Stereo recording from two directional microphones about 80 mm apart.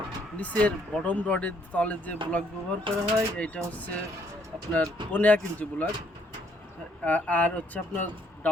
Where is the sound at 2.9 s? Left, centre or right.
Right.